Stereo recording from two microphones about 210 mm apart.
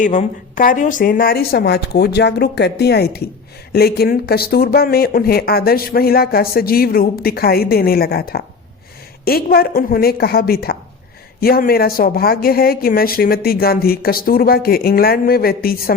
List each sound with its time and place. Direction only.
0.0 s speech: 35° left (ahead or behind)